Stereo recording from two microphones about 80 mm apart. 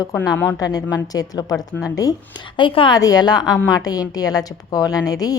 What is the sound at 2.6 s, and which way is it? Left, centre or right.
Speech, left.